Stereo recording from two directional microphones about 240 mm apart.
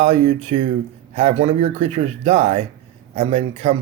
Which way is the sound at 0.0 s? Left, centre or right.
Right.